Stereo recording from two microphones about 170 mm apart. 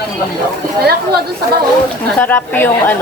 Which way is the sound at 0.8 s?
65° right (ahead or behind).